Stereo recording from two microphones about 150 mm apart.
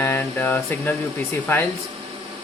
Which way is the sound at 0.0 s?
15° left (ahead or behind).